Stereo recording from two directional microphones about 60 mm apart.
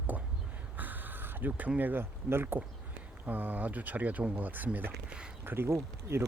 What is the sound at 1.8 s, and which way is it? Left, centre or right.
Speech, right.